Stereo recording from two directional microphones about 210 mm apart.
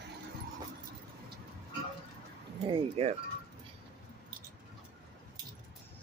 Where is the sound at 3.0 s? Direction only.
25° right (ahead or behind).